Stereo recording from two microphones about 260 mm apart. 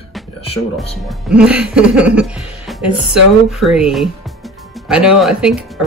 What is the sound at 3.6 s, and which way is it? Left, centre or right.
Speech, centre.